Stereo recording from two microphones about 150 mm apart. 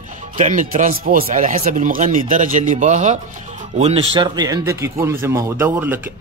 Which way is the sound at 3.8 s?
40° right (ahead or behind).